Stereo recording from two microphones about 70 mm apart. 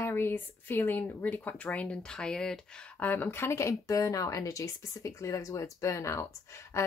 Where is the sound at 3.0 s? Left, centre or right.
Left.